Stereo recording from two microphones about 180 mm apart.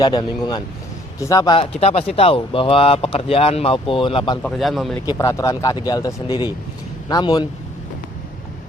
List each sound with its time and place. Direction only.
0.0 s speech: 25° left (ahead or behind)
1.8 s speech: 35° left (ahead or behind)
4.4 s a man's voice: centre (ahead or behind)
5.0 s speech: 15° left (ahead or behind)